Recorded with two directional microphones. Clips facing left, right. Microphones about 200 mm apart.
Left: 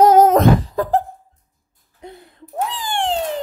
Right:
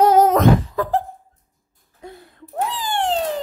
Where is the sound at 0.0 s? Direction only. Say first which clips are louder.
Left 3 dB; 45° left (ahead or behind).